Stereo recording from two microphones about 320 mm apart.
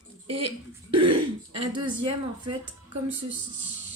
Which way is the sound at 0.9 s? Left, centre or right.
Centre.